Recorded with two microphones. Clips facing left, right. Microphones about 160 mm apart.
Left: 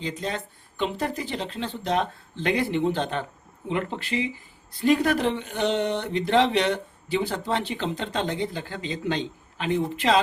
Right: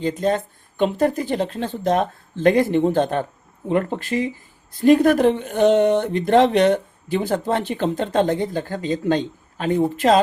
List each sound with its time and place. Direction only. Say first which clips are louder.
0.0 s speech: right 10 dB; 50° right (ahead or behind)